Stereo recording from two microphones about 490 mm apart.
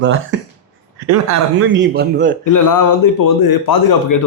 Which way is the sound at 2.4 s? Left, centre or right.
Left.